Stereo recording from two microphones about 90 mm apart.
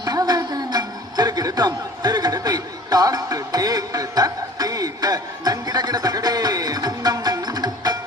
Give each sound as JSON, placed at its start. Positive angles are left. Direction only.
{"t": 0.0, "sound": "music", "side_deg": -45}